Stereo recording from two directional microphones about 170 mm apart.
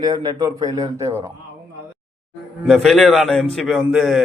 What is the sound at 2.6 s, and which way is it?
A man's voice, centre (ahead or behind).